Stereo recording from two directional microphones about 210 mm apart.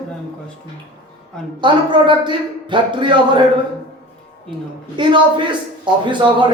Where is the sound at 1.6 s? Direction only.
20° right (ahead or behind).